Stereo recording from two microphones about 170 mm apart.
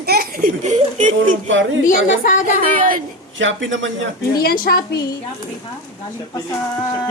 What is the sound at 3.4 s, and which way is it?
Speech, 90° right.